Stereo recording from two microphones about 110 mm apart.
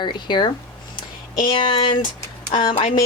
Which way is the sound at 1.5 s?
50° left (ahead or behind).